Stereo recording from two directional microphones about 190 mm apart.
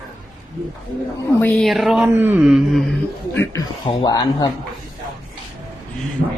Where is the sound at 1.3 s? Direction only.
5° left (ahead or behind).